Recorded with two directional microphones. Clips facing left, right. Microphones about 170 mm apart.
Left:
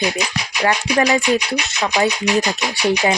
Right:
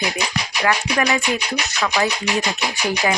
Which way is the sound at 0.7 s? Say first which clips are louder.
Left 3 dB; 30° left (ahead or behind).